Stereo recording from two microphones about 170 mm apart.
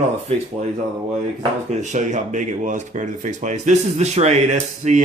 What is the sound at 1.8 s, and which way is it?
Speech, 45° right (ahead or behind).